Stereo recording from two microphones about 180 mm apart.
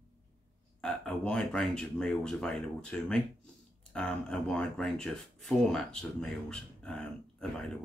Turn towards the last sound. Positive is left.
turn(degrees=5)  # may be behind; listen again after turning